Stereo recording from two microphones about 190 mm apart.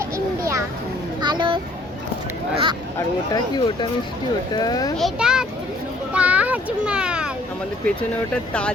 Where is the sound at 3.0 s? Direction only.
20° left (ahead or behind).